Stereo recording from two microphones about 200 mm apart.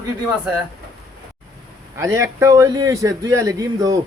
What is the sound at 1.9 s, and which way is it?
A man's voice, 15° right (ahead or behind).